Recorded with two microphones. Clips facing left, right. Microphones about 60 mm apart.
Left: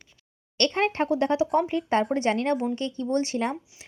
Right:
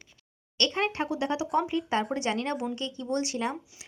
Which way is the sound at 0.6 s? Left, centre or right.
Left.